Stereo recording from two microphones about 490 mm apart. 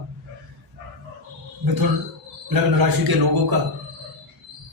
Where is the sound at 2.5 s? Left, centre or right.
Right.